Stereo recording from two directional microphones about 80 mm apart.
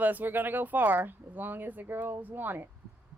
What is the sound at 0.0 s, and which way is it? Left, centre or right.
Speech, right.